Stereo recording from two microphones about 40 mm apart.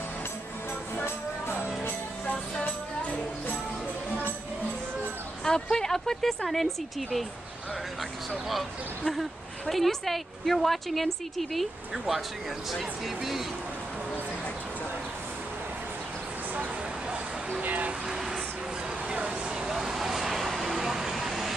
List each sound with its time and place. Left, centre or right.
5.4 s speech: centre
8.5 s a woman's voice: centre
11.9 s a woman's voice: centre
16.5 s vehicle: right
18.0 s music: centre
19.2 s vehicle: right; by 21.5 s centre